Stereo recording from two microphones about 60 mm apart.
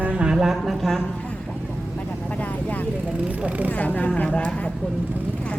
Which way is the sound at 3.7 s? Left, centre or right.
Left.